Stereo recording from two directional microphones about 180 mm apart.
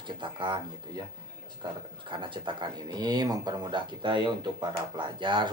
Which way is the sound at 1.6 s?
25° right (ahead or behind).